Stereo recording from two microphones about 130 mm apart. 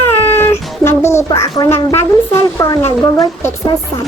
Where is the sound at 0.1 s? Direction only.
20° left (ahead or behind).